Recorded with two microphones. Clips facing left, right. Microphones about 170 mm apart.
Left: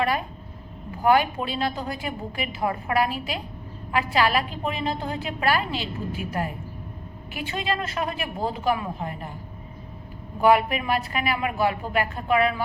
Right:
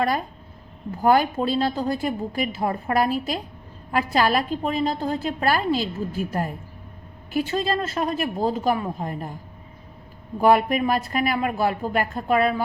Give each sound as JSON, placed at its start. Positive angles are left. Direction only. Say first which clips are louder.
{"t": 1.0, "sound": "a woman's voice", "louder": "right 2 dB", "side_deg": -35}
{"t": 10.4, "sound": "a woman's voice", "louder": "right 2 dB", "side_deg": -40}